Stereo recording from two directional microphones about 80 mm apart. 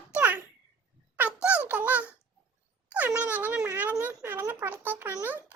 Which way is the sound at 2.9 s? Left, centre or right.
Right.